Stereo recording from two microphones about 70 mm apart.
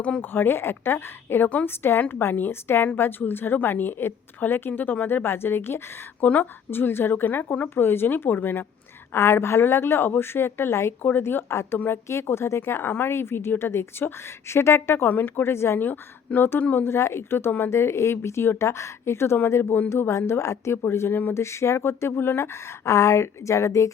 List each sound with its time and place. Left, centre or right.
0.2 s a woman's voice: left
1.5 s speech: left
1.7 s a woman's voice: left
15.9 s a woman's voice: left